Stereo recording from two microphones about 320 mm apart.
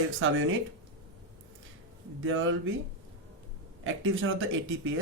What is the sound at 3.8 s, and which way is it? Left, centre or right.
Speech, right.